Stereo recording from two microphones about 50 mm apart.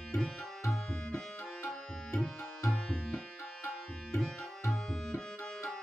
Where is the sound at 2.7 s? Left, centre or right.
Centre.